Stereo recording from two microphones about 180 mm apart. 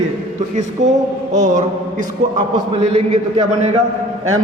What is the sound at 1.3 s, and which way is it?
A man's voice, 45° right (ahead or behind).